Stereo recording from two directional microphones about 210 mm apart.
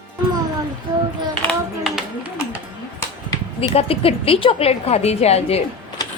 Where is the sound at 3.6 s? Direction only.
25° left (ahead or behind).